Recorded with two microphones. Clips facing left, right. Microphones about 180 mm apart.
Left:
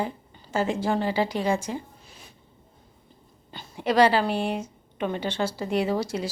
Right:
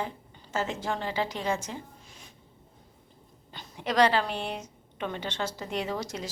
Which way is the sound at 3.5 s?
10° left (ahead or behind).